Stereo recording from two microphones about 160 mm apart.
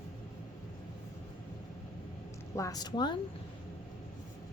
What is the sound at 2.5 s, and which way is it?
Speech, 20° left (ahead or behind).